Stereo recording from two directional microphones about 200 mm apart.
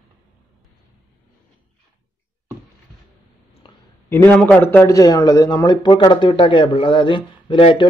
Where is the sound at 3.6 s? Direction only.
25° left (ahead or behind).